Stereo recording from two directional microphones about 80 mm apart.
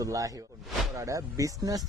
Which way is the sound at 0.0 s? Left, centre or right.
Right.